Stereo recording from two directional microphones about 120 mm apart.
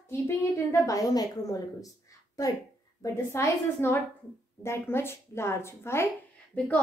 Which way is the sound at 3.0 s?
25° left (ahead or behind).